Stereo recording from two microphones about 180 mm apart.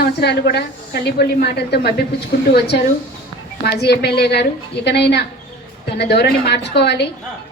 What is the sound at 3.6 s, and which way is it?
A woman's voice, 65° left (ahead or behind).